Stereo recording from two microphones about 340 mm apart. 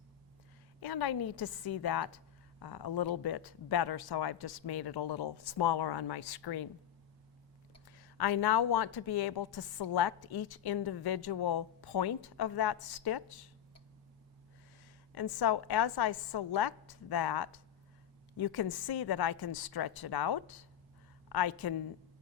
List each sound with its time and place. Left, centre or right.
0.8 s a woman's voice: left
7.9 s a woman's voice: left
15.1 s a woman's voice: left